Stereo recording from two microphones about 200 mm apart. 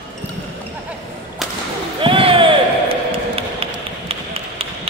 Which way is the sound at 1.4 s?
Centre (ahead or behind).